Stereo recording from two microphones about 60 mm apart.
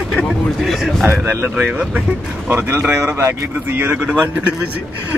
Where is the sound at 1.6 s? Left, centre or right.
Centre.